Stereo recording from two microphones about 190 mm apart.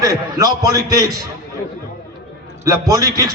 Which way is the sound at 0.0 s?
20° right (ahead or behind).